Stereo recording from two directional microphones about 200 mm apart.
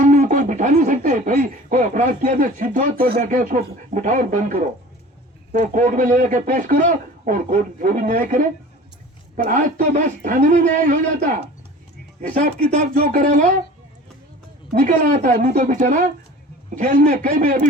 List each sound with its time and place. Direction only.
0.0 s a man's voice: 40° right (ahead or behind)
14.7 s a man's voice: 40° right (ahead or behind)